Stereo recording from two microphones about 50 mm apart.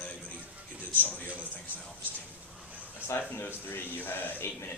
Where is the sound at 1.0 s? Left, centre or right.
Left.